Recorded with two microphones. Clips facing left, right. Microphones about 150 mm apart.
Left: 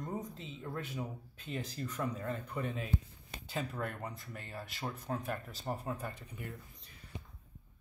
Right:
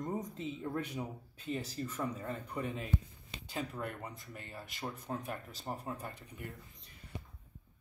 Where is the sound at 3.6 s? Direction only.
10° right (ahead or behind).